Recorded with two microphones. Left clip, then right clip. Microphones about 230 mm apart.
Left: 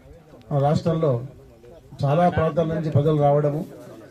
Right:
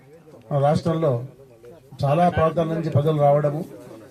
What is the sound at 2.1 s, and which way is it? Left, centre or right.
A man's voice, right.